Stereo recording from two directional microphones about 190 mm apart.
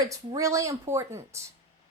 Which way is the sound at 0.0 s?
15° right (ahead or behind).